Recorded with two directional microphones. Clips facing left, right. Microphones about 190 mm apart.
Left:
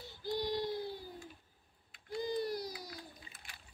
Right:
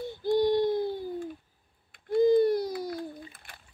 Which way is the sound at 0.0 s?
55° right (ahead or behind).